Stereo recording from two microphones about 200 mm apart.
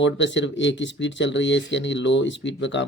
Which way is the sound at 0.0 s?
65° left (ahead or behind).